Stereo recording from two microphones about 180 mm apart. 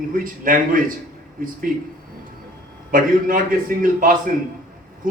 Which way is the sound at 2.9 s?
50° right (ahead or behind).